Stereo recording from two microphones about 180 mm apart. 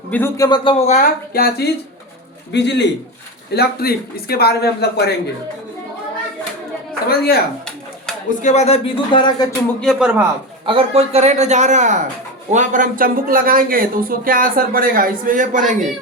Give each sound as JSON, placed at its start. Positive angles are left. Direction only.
{"t": 0.1, "sound": "speech", "side_deg": 15}
{"t": 0.9, "sound": "speech", "side_deg": 45}
{"t": 2.5, "sound": "a man's voice", "side_deg": 70}
{"t": 3.5, "sound": "speech", "side_deg": 60}
{"t": 7.1, "sound": "speech", "side_deg": 60}
{"t": 8.3, "sound": "speech", "side_deg": 45}
{"t": 9.8, "sound": "speech", "side_deg": -5}
{"t": 10.7, "sound": "a man's voice", "side_deg": -35}